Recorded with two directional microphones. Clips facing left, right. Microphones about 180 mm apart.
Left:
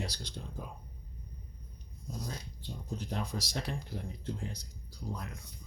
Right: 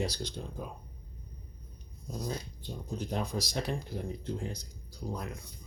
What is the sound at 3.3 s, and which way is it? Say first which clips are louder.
Speech: right 3 dB; 15° right (ahead or behind).